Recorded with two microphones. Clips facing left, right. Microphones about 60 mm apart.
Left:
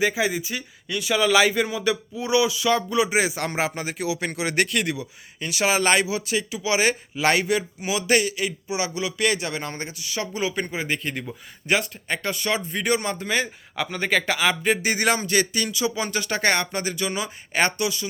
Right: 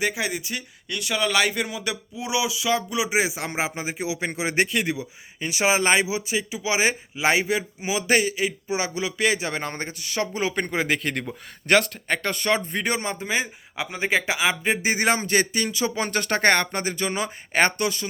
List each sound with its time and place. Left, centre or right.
0.0 s speech: centre; by 9.5 s right
9.5 s speech: right
10.7 s a man's voice: right
11.6 s speech: right